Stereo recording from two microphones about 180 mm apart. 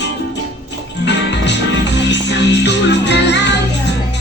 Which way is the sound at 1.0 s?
75° left (ahead or behind).